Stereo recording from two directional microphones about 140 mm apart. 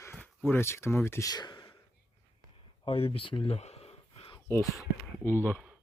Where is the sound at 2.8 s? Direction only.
40° left (ahead or behind).